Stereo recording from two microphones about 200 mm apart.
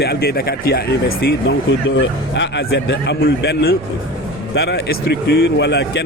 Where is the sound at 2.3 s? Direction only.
60° left (ahead or behind).